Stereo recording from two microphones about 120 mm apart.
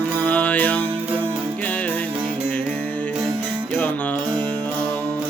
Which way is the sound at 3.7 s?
10° left (ahead or behind).